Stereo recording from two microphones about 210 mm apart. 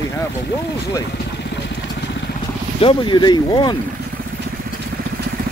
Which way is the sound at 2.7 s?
25° left (ahead or behind).